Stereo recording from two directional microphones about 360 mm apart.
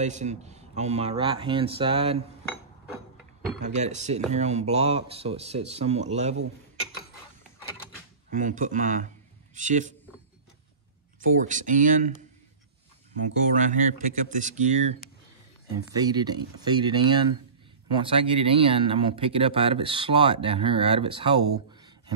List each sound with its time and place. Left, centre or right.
0.0 s speech: centre
3.5 s speech: centre
8.3 s speech: right
11.1 s speech: right
13.6 s speech: right
16.0 s speech: centre